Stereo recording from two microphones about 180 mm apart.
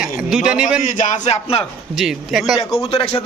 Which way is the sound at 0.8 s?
45° left (ahead or behind).